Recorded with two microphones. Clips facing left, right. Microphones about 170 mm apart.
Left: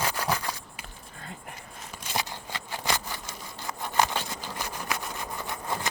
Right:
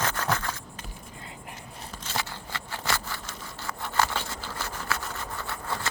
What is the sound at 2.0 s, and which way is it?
Sawing, 15° left (ahead or behind).